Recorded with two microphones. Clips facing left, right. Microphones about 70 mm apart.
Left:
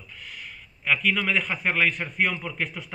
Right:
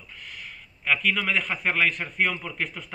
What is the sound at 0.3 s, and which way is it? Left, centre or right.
A man's voice, centre.